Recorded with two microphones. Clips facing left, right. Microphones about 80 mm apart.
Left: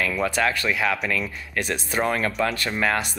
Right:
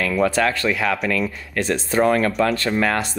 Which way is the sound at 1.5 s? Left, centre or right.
Centre.